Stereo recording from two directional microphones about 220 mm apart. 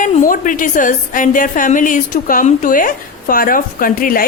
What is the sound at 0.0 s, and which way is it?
A woman's voice, 35° left (ahead or behind).